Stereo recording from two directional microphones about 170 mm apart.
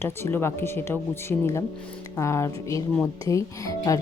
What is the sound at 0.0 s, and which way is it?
Speech, 15° left (ahead or behind).